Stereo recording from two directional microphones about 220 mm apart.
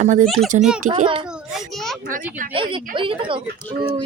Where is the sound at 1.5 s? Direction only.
Centre (ahead or behind).